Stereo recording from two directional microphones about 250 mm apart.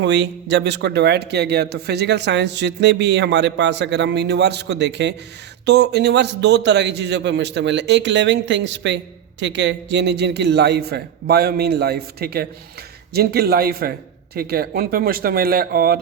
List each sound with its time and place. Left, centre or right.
0.0 s a man's voice: right